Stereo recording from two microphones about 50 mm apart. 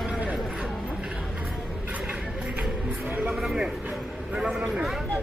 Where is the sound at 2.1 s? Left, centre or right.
Right.